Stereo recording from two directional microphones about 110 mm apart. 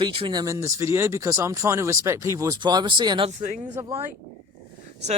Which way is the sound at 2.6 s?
45° right (ahead or behind).